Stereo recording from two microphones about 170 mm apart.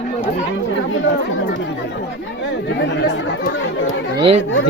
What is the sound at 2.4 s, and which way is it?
Chatter, 90° left.